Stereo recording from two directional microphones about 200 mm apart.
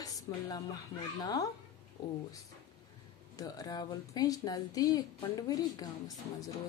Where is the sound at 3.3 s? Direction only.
20° left (ahead or behind).